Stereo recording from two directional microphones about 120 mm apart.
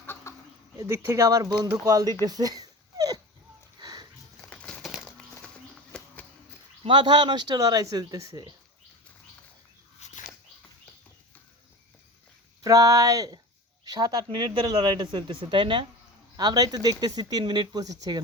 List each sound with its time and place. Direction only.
0.0 s chicken: 20° left (ahead or behind)
0.8 s speech: 25° right (ahead or behind)
2.2 s cat: 30° right (ahead or behind)
3.8 s sniff: 35° right (ahead or behind)
4.4 s a sound: 10° left (ahead or behind)
4.8 s a sound: centre (ahead or behind)
5.9 s music: 5° left (ahead or behind)
6.8 s speech: 40° right (ahead or behind)
10.0 s a sound: 75° left (ahead or behind)
12.6 s speech: 30° right (ahead or behind); by 15.9 s 45° right (ahead or behind)
16.4 s speech: 35° right (ahead or behind)